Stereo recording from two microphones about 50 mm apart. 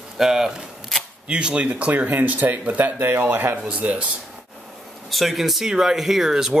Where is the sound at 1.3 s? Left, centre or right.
Right.